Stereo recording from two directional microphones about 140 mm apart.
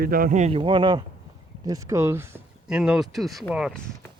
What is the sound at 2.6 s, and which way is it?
Speech, 5° right (ahead or behind).